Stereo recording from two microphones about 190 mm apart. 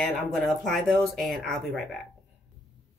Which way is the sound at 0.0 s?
Centre (ahead or behind).